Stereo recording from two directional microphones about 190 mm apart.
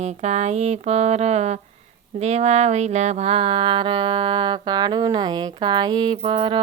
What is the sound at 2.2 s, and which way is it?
Speech, 35° right (ahead or behind).